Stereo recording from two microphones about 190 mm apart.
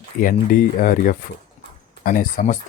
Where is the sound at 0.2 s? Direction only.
45° left (ahead or behind).